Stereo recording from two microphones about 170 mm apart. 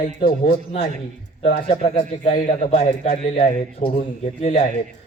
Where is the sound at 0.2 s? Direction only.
30° left (ahead or behind).